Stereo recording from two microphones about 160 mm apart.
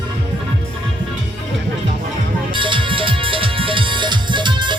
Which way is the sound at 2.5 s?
30° right (ahead or behind).